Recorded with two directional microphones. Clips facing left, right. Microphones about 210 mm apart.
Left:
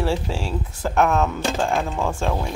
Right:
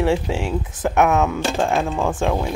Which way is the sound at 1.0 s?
5° right (ahead or behind).